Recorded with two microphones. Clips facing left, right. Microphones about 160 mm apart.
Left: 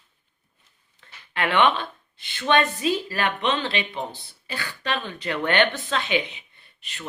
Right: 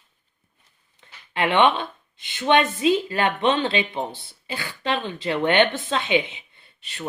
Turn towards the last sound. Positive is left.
turn(degrees=-30)  # may be behind; listen again after turning